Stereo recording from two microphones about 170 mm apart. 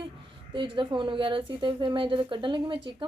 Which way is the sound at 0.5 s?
30° right (ahead or behind).